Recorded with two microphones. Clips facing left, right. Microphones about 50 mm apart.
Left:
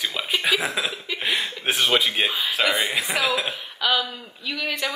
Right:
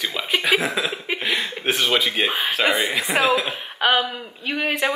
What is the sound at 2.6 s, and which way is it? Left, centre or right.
A woman's voice, right.